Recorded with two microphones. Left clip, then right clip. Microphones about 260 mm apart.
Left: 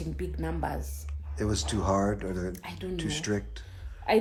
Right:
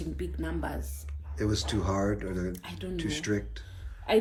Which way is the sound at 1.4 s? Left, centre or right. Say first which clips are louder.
Even; centre.